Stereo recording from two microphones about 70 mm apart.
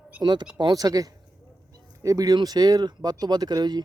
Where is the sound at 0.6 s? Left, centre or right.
Right.